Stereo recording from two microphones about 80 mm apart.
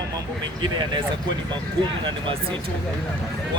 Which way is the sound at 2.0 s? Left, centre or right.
Right.